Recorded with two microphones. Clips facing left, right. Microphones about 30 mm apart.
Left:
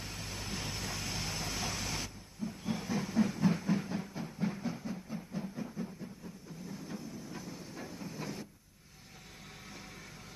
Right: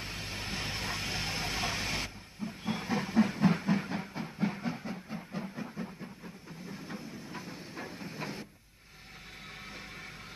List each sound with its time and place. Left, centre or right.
0.0 s vehicle: right
6.7 s train: right